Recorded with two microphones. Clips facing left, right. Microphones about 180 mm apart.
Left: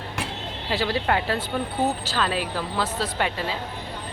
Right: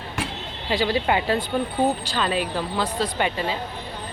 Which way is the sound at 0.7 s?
Centre (ahead or behind).